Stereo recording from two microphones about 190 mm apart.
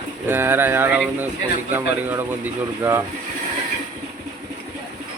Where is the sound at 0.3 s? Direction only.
10° right (ahead or behind).